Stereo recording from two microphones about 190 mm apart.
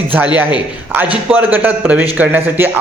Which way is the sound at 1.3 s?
10° right (ahead or behind).